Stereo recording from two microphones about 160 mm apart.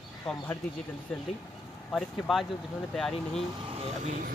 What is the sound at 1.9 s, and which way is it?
Speech, 10° left (ahead or behind).